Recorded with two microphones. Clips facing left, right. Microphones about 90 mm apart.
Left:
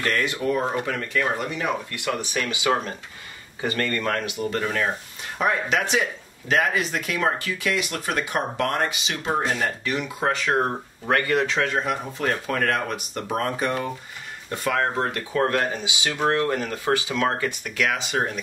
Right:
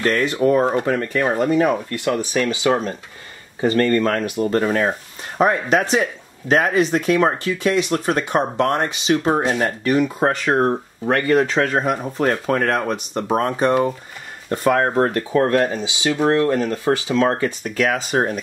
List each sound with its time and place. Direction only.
0.0 s speech: 35° right (ahead or behind)
3.6 s speech: 35° right (ahead or behind)
8.8 s speech: 35° right (ahead or behind)